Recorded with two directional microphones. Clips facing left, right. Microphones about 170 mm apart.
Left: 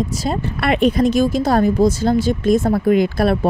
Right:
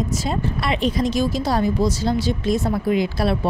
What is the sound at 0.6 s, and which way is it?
Speech, 55° left (ahead or behind).